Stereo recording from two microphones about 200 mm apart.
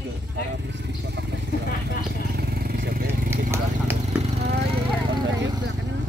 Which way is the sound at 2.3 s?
50° right (ahead or behind).